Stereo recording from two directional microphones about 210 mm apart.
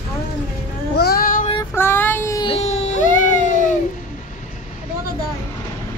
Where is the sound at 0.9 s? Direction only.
45° left (ahead or behind).